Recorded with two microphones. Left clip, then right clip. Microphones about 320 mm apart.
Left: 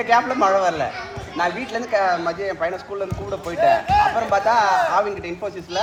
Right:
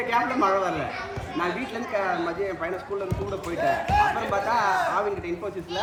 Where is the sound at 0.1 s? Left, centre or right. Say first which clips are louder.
Left 6 dB; left.